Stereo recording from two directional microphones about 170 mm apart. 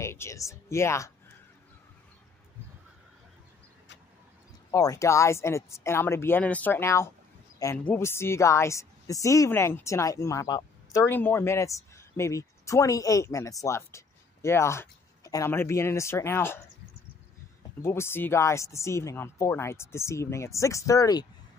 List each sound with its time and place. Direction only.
0.0 s speech: 15° left (ahead or behind)
4.6 s a woman's voice: 20° left (ahead or behind)
17.8 s a woman's voice: 15° left (ahead or behind)